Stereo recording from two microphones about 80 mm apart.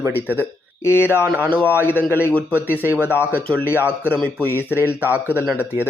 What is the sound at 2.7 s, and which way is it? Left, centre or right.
Speech, right.